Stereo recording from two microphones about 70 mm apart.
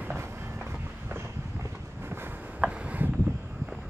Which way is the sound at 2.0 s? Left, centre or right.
Right.